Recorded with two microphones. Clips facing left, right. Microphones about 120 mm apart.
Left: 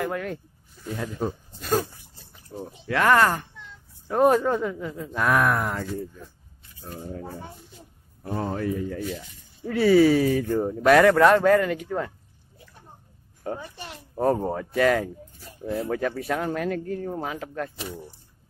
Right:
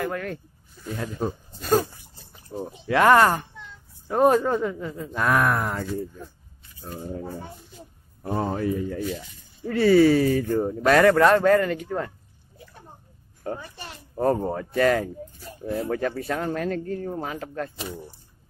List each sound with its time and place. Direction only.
0.0 s speech: 15° left (ahead or behind)
0.9 s speech: centre (ahead or behind)
1.6 s dog: 40° right (ahead or behind)
2.5 s speech: 20° right (ahead or behind)
4.1 s speech: 5° right (ahead or behind)
6.8 s speech: 20° right (ahead or behind)
8.4 s speech: 15° right (ahead or behind)
9.7 s speech: 5° left (ahead or behind)
13.4 s a child's voice: 15° left (ahead or behind)